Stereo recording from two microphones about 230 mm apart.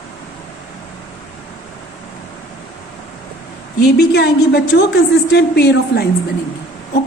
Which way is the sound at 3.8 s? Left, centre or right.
Left.